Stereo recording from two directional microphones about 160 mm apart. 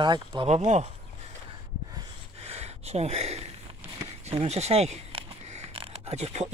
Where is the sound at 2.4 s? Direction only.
40° right (ahead or behind).